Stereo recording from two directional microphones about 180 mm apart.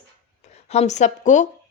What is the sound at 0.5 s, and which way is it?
Speech, 35° left (ahead or behind).